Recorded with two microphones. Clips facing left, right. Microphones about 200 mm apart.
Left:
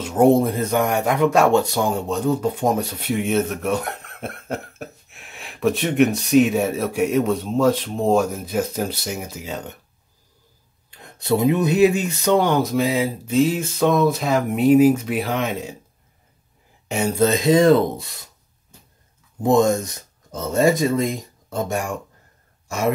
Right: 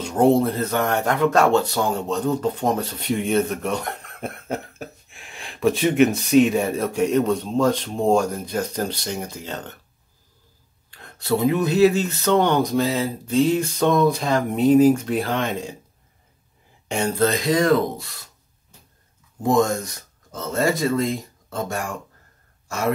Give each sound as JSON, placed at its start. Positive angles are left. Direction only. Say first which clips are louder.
{"t": 0.0, "sound": "a sound", "louder": "left 2 dB", "side_deg": 5}
{"t": 0.3, "sound": "speech", "louder": "left 2 dB", "side_deg": 15}
{"t": 10.9, "sound": "speech", "louder": "left 2 dB", "side_deg": 20}
{"t": 16.8, "sound": "a sound", "louder": "left 1 dB", "side_deg": 5}
{"t": 17.2, "sound": "speech", "louder": "left 5 dB", "side_deg": 20}
{"t": 19.4, "sound": "speech", "louder": "left 3 dB", "side_deg": 20}